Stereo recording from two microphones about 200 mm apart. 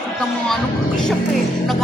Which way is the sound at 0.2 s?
5° left (ahead or behind).